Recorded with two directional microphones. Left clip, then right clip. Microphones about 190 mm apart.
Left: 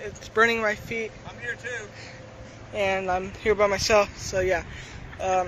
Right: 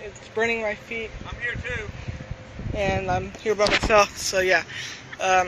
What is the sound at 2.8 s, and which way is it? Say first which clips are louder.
Speech: even; centre (ahead or behind).